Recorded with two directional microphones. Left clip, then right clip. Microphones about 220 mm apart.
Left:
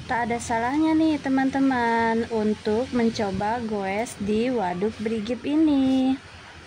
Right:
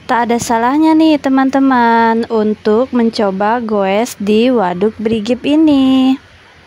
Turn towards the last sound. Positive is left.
turn(degrees=-40)  # may be behind; listen again after turning